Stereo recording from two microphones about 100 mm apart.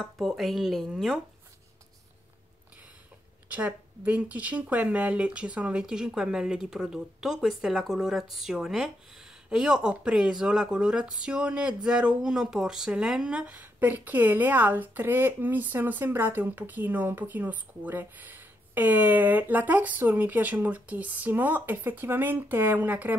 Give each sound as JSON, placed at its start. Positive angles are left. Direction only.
{"t": 0.0, "sound": "speech", "side_deg": 0}
{"t": 3.4, "sound": "speech", "side_deg": -15}